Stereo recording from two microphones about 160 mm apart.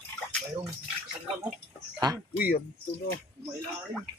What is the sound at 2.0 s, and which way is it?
Speech, 25° right (ahead or behind).